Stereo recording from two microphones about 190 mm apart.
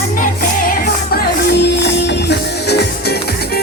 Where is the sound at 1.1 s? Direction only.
60° left (ahead or behind).